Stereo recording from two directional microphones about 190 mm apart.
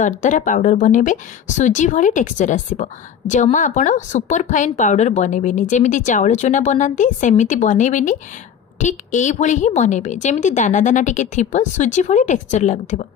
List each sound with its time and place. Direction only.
0.0 s speech: 40° left (ahead or behind)